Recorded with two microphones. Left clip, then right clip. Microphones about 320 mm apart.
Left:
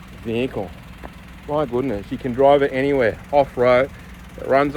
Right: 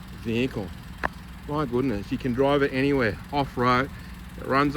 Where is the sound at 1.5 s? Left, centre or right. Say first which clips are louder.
Left 5 dB; left.